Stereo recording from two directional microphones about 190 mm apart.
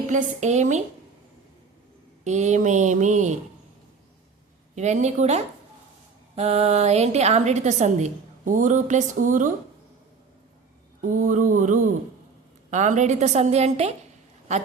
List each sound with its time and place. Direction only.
0.1 s a woman's voice: 40° right (ahead or behind)
2.2 s a woman's voice: 35° right (ahead or behind)
4.7 s a woman's voice: 40° right (ahead or behind)
11.0 s mantra: 45° right (ahead or behind)
12.7 s a woman's voice: 40° right (ahead or behind)